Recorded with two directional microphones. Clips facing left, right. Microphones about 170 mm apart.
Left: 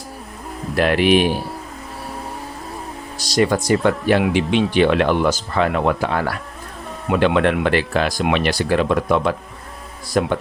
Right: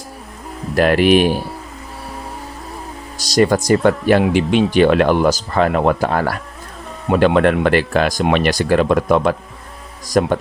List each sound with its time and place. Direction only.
0.8 s speech: 45° right (ahead or behind)
3.2 s speech: 40° right (ahead or behind)